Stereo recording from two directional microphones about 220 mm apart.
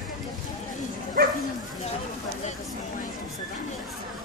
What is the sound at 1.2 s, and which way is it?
Bow-wow, 40° right (ahead or behind).